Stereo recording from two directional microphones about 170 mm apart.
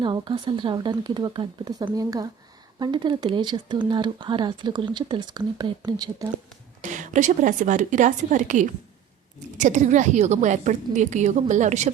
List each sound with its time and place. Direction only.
0.0 s speech: 30° right (ahead or behind)
6.8 s a woman's voice: 45° right (ahead or behind)